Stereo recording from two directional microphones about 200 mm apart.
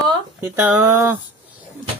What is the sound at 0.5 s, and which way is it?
Speech, 10° right (ahead or behind).